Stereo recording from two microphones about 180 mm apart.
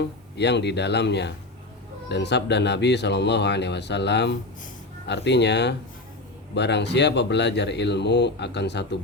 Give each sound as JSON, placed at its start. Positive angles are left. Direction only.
{"t": 0.3, "sound": "speech", "side_deg": 70}